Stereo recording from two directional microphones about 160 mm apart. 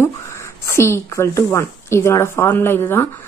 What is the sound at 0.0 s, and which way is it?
A woman's voice, 15° left (ahead or behind).